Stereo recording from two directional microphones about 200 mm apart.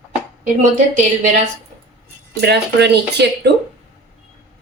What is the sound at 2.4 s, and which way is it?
A woman's voice, 60° right (ahead or behind).